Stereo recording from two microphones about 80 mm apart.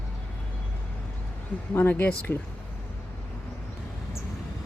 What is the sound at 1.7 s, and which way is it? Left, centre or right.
Speech, left.